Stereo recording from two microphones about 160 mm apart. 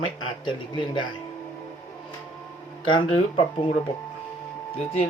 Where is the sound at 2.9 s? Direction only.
35° left (ahead or behind).